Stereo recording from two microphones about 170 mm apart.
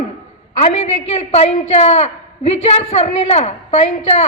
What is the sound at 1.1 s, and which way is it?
A woman's voice, 40° left (ahead or behind).